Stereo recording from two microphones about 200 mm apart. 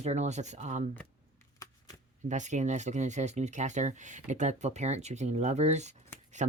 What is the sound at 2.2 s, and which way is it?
Speech, 35° right (ahead or behind).